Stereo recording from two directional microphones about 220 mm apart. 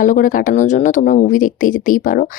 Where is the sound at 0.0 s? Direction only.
35° left (ahead or behind).